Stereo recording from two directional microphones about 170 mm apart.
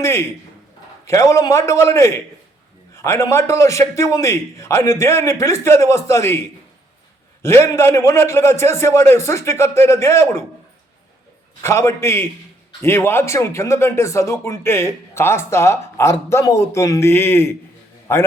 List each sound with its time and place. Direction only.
0.0 s speech: 15° left (ahead or behind)
7.4 s speech: 15° left (ahead or behind)
11.6 s speech: 15° left (ahead or behind)